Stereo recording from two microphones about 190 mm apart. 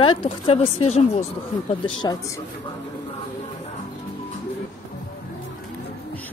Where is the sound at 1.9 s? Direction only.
25° left (ahead or behind).